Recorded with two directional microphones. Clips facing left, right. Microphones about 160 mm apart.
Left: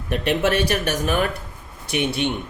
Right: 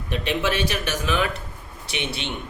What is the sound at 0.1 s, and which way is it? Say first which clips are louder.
A man's voice: left 4 dB; 50° left (ahead or behind).